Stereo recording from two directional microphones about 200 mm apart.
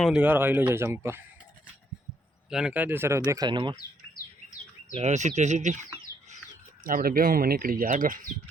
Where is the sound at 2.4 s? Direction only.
5° right (ahead or behind); by 3.7 s 25° right (ahead or behind).